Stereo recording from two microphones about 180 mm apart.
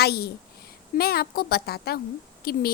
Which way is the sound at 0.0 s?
60° left (ahead or behind).